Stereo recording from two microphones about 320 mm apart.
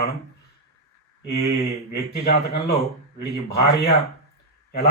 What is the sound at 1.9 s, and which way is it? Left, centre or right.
A man's voice, left.